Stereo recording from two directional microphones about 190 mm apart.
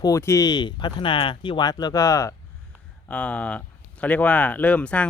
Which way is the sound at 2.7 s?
10° right (ahead or behind).